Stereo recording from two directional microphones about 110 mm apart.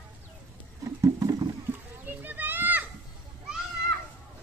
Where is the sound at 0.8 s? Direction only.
35° right (ahead or behind).